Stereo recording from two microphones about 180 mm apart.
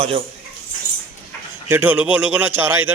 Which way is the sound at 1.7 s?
10° right (ahead or behind).